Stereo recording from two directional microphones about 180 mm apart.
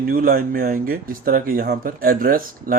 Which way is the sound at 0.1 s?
55° right (ahead or behind).